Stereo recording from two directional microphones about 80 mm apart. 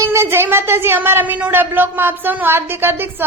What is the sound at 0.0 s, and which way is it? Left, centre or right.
A woman's voice, right.